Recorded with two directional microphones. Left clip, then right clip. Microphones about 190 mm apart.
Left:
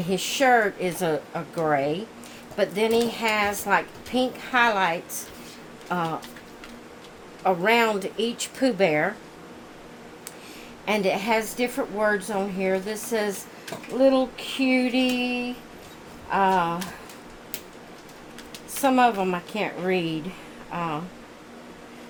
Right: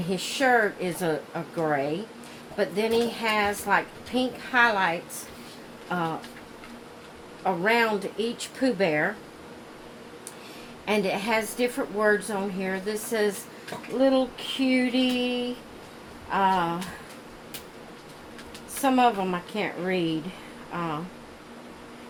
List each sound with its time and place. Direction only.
0.1 s a woman's voice: 40° left (ahead or behind)
7.4 s speech: 45° left (ahead or behind)
10.8 s a woman's voice: 35° left (ahead or behind)
18.8 s a woman's voice: 40° left (ahead or behind)